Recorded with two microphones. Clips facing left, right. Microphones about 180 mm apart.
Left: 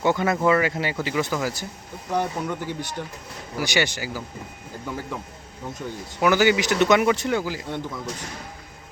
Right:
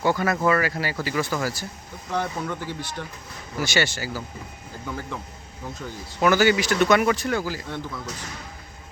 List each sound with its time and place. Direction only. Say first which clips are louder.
0.0 s speech: left 1 dB; 20° left (ahead or behind)